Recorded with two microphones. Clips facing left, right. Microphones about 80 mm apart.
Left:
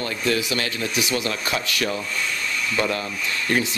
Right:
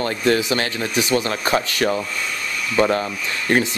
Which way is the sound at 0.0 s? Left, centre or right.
Right.